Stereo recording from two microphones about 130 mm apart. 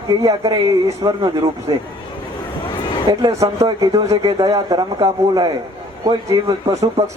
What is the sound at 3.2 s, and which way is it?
A man's voice, 25° right (ahead or behind).